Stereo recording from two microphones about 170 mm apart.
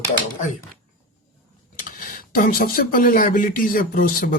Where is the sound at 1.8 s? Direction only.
55° left (ahead or behind).